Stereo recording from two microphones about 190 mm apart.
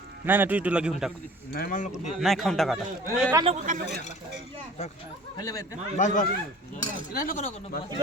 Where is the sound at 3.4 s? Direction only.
35° right (ahead or behind).